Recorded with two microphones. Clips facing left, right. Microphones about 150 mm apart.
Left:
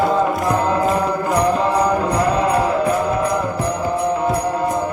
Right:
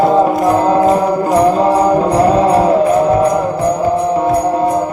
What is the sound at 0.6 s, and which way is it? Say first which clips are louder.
Music: right 7 dB; 35° right (ahead or behind).